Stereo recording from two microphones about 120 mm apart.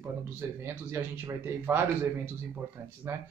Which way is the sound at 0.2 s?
20° right (ahead or behind).